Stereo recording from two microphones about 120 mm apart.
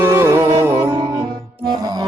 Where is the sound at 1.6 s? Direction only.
35° right (ahead or behind).